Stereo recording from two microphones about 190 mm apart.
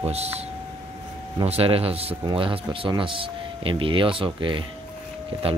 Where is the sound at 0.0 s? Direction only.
35° right (ahead or behind).